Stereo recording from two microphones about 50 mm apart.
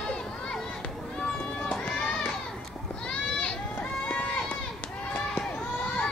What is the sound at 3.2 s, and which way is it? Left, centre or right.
Goat, left.